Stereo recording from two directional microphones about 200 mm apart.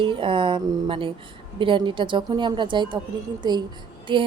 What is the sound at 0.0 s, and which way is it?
A woman's voice, 25° right (ahead or behind).